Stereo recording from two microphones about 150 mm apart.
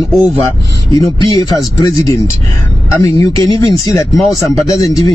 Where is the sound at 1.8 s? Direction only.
20° left (ahead or behind).